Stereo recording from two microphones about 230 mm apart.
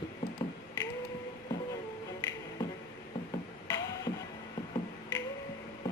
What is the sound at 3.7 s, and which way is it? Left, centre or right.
Music, centre.